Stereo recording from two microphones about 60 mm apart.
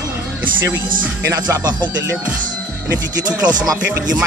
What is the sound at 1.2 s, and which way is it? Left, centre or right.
Speech, right.